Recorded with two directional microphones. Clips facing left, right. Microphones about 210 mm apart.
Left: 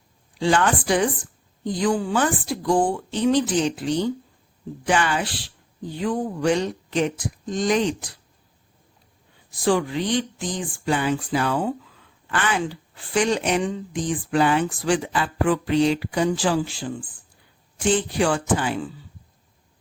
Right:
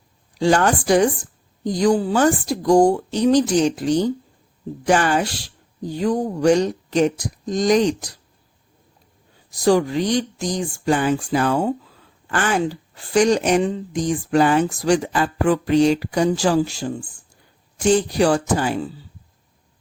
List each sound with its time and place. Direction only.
0.3 s speech: 40° right (ahead or behind)
9.5 s speech: 40° right (ahead or behind)